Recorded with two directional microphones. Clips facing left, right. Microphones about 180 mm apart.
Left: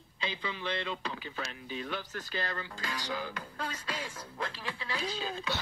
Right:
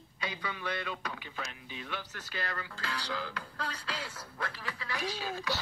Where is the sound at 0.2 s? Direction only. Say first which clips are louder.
Left 1 dB; 25° left (ahead or behind).